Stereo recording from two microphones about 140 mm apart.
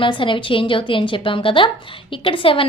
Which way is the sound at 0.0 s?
35° left (ahead or behind).